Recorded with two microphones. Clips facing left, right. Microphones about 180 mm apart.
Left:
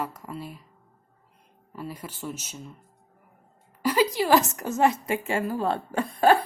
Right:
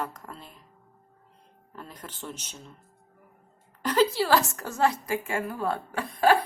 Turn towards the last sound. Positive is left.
turn(degrees=30)  # may be behind; listen again after turning